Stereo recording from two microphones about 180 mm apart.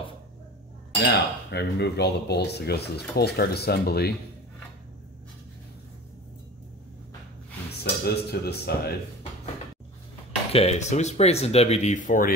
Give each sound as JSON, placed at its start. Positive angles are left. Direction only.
{"t": 1.1, "sound": "speech", "side_deg": 70}
{"t": 7.8, "sound": "speech", "side_deg": 65}
{"t": 10.5, "sound": "speech", "side_deg": 35}